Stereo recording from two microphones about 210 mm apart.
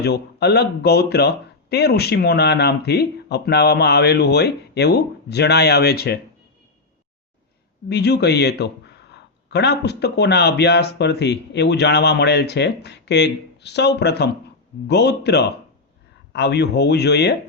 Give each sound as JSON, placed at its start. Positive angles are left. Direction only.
{"t": 0.0, "sound": "speech", "side_deg": 50}
{"t": 7.9, "sound": "speech", "side_deg": 50}